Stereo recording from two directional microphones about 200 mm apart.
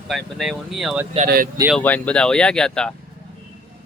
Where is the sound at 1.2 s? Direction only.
45° right (ahead or behind).